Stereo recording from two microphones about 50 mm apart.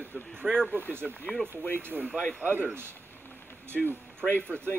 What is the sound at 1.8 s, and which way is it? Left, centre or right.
Speech, right.